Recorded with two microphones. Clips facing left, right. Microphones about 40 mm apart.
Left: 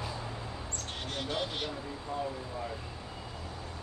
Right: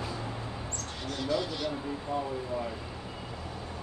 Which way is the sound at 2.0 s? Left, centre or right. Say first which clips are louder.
Right 3 dB; right.